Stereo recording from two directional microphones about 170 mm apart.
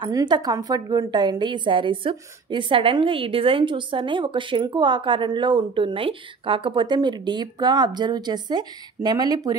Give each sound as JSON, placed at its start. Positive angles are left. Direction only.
{"t": 0.0, "sound": "a woman's voice", "side_deg": -25}